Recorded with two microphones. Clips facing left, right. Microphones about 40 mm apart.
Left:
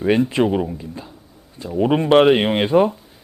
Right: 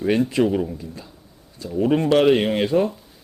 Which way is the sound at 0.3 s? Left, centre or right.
Left.